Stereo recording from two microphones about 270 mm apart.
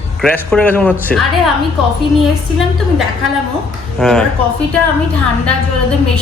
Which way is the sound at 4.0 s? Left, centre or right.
Centre.